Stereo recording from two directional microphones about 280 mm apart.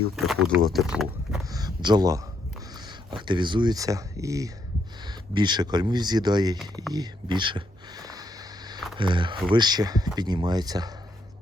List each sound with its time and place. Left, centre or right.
0.2 s speech: centre
1.5 s speech: centre
6.9 s a sound: centre
9.0 s speech: centre